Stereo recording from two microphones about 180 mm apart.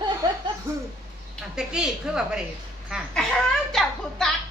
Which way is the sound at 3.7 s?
5° left (ahead or behind).